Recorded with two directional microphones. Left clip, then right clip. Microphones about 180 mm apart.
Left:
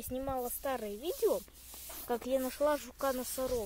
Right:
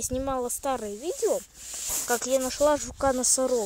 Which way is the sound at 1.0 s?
15° right (ahead or behind).